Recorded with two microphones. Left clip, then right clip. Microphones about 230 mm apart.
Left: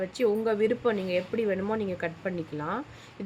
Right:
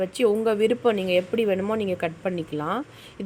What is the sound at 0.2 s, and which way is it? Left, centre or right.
Speech, centre.